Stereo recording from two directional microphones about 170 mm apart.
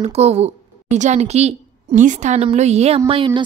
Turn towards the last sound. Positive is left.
turn(degrees=-30)  # may be behind; listen again after turning